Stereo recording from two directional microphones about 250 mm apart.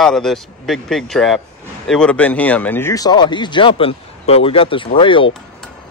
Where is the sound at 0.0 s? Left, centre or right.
Centre; by 5.3 s left.